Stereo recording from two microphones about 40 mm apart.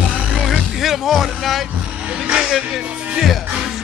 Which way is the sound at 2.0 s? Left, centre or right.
Right.